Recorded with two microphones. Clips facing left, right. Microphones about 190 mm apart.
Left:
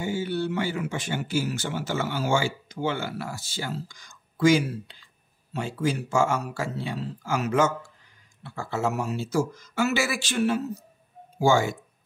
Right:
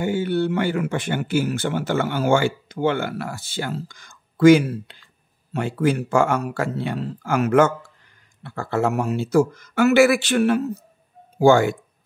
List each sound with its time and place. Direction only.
0.0 s speech: 60° right (ahead or behind)